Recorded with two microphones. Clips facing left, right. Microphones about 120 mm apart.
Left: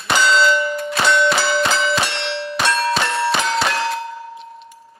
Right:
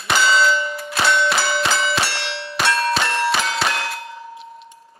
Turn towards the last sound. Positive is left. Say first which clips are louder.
# left 4 dB
turn(degrees=0)  # may be behind; listen again after turning